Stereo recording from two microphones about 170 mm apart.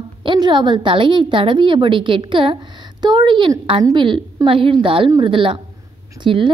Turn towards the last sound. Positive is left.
turn(degrees=-30)  # may be behind; listen again after turning